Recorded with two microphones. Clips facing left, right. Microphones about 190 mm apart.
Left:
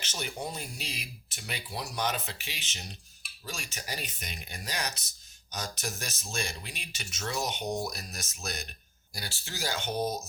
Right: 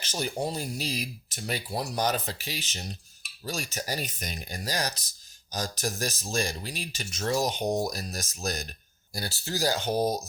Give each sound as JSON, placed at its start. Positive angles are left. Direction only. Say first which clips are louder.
{"t": 0.0, "sound": "speech", "louder": "right 6 dB", "side_deg": -35}